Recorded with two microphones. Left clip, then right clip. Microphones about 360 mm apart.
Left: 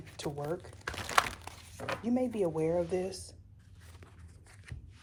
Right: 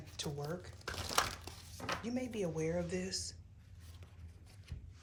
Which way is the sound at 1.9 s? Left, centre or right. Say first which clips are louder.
Left 7 dB; centre.